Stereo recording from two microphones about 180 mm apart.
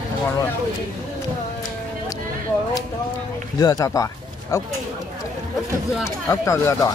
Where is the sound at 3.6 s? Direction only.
20° left (ahead or behind).